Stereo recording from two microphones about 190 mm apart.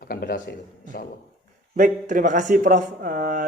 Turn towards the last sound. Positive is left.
turn(degrees=-45)  # may be behind; listen again after turning